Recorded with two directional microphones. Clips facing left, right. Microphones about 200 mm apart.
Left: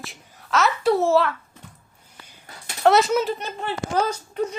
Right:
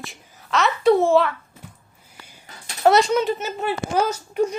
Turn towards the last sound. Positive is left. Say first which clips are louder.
# right 4 dB
turn(degrees=-10)  # may be behind; listen again after turning